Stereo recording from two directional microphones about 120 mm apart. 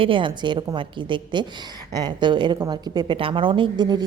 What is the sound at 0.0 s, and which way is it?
A woman's voice, 45° right (ahead or behind).